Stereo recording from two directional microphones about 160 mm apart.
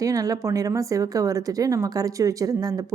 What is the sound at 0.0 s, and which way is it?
Speech, 20° right (ahead or behind).